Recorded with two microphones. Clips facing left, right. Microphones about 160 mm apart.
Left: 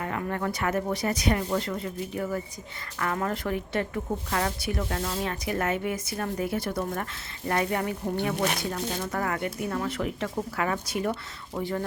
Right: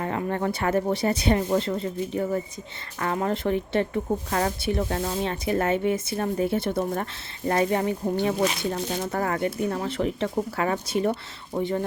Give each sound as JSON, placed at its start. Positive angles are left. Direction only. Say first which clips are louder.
{"t": 0.0, "sound": "speech", "louder": "right 3 dB", "side_deg": -30}